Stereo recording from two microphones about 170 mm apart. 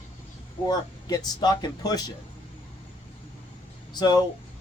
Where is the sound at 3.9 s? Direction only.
25° left (ahead or behind).